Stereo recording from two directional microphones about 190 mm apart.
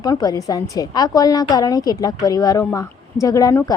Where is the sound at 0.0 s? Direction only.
20° left (ahead or behind).